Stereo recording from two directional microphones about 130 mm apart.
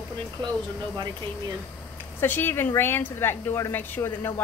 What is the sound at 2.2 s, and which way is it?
A woman's voice, 15° left (ahead or behind).